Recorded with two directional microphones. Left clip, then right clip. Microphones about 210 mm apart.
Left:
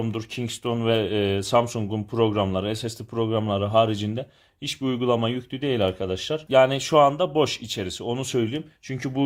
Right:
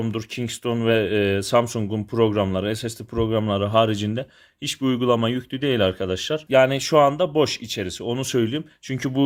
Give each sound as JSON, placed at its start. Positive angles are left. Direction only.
{"t": 0.0, "sound": "speech", "side_deg": -25}